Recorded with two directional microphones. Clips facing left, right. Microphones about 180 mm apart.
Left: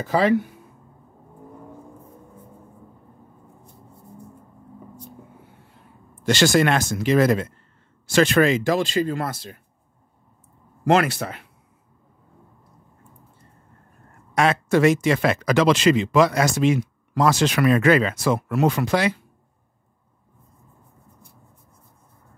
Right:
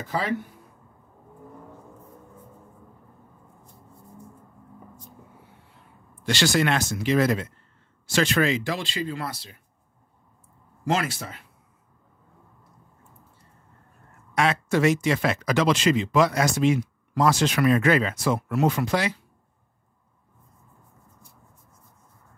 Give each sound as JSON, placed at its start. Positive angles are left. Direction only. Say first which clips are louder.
{"t": 0.0, "sound": "speech", "louder": "left 9 dB", "side_deg": 80}
{"t": 6.2, "sound": "speech", "louder": "left 5 dB", "side_deg": 50}
{"t": 10.9, "sound": "speech", "louder": "left 7 dB", "side_deg": 65}
{"t": 14.3, "sound": "speech", "louder": "left 4 dB", "side_deg": 45}